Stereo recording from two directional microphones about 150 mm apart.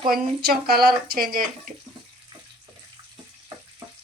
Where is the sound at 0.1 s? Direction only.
75° right (ahead or behind).